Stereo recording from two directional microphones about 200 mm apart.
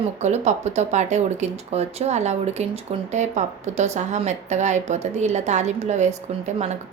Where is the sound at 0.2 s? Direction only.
35° right (ahead or behind).